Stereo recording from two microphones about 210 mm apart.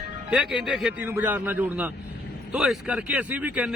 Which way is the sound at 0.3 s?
5° right (ahead or behind).